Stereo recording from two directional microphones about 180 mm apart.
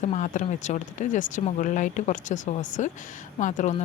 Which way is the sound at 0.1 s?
40° left (ahead or behind).